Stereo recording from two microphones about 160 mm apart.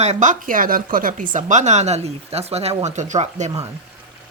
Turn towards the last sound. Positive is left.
turn(degrees=-45)  # may be behind; listen again after turning